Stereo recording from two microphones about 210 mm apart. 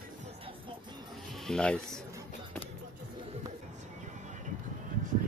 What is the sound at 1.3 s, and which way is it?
Speech, centre (ahead or behind).